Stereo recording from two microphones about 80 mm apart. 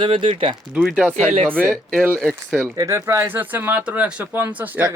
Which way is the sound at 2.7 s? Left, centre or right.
Right.